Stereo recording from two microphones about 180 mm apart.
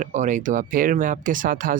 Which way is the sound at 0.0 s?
45° right (ahead or behind).